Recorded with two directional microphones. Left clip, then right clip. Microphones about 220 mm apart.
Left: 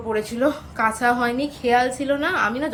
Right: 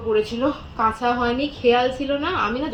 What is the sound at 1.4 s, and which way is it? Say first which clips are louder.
A woman's voice: right 1 dB; 10° left (ahead or behind).